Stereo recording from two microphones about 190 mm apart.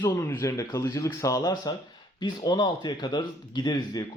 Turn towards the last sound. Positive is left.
turn(degrees=20)  # may be behind; listen again after turning